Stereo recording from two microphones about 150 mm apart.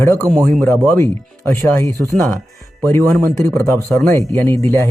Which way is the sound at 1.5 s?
15° left (ahead or behind).